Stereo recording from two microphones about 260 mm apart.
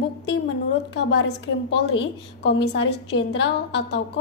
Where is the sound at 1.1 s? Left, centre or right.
Left.